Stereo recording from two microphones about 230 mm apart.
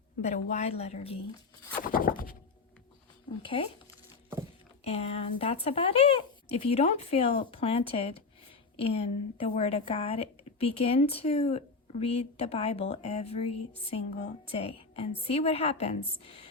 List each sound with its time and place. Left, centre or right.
0.5 s speech: left
1.9 s a sound: left
3.4 s speech: left
4.8 s speech: left